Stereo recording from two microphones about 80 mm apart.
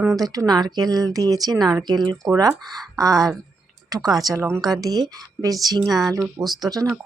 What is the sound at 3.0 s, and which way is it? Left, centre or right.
A woman's voice, right.